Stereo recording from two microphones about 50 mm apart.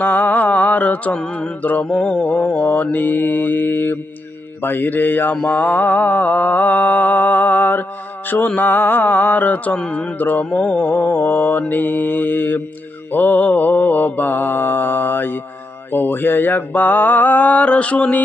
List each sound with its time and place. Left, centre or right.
0.0 s mantra: left
2.6 s mantra: left
10.6 s mantra: left
10.8 s mantra: left